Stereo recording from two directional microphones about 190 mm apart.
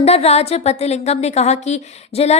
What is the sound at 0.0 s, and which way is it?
A woman's voice, 35° left (ahead or behind).